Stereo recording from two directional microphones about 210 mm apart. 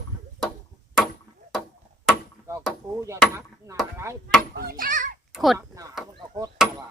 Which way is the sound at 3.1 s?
15° right (ahead or behind).